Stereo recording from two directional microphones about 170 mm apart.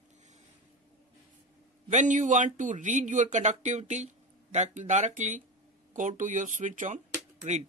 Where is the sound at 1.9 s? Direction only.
45° right (ahead or behind).